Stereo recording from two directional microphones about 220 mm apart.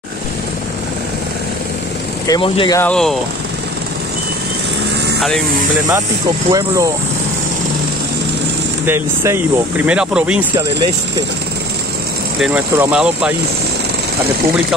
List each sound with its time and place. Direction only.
2.2 s speech: 20° left (ahead or behind)
2.8 s speech: 5° left (ahead or behind)
6.5 s speech: 15° right (ahead or behind)
8.8 s speech: 10° right (ahead or behind)
12.4 s speech: 5° right (ahead or behind)